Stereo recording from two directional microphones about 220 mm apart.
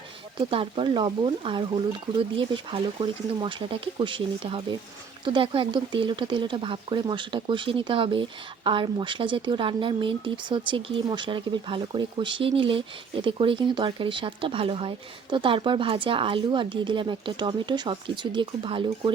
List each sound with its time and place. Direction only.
0.3 s speech: 25° right (ahead or behind)